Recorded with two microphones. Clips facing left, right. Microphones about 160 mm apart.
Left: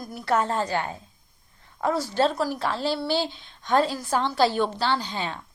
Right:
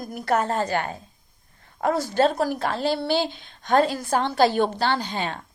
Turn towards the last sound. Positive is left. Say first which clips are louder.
# right 1 dB
turn(degrees=-55)  # may be behind; listen again after turning